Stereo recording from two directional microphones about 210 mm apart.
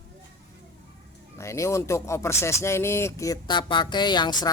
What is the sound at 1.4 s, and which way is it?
Speech, 15° left (ahead or behind).